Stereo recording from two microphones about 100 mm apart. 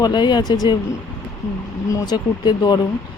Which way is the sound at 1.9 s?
40° left (ahead or behind).